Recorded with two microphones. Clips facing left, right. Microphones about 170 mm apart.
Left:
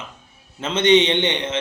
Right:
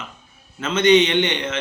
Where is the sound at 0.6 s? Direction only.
30° left (ahead or behind).